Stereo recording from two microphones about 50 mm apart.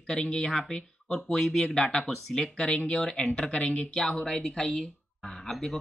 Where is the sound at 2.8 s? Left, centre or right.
Centre.